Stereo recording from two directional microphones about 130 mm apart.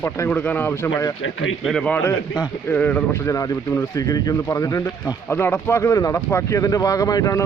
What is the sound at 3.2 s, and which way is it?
Speech, 25° left (ahead or behind).